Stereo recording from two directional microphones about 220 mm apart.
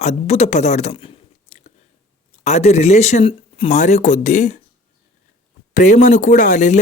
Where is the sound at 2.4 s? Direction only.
30° left (ahead or behind).